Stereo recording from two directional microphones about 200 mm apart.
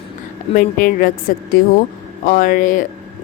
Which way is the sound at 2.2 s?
40° left (ahead or behind).